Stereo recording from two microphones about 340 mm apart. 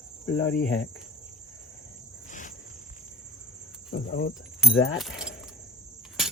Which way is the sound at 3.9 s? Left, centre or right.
Left.